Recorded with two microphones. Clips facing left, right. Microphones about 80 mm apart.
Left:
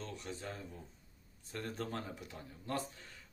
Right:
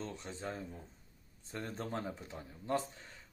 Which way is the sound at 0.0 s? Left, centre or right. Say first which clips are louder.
Right 2 dB; right.